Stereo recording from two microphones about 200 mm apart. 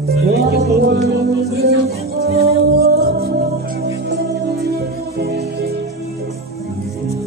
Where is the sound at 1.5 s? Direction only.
50° right (ahead or behind).